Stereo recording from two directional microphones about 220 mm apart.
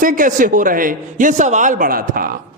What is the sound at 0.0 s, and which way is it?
A man's voice, 35° right (ahead or behind).